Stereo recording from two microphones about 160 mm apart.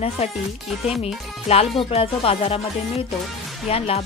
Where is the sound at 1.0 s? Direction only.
40° left (ahead or behind).